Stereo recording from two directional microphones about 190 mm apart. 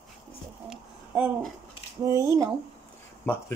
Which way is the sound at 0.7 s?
5° right (ahead or behind).